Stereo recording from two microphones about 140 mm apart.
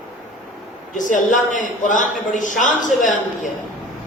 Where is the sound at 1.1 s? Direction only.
65° left (ahead or behind).